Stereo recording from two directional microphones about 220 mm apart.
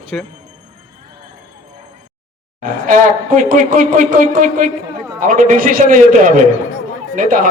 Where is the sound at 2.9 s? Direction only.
35° right (ahead or behind).